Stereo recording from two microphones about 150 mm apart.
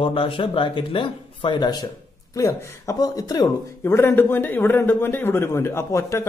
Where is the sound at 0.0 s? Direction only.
35° left (ahead or behind).